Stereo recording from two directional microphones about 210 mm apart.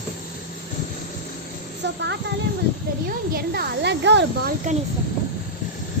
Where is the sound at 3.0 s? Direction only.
45° right (ahead or behind).